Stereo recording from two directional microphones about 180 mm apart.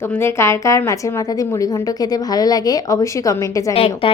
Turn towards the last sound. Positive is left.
turn(degrees=35)  # may be behind; listen again after turning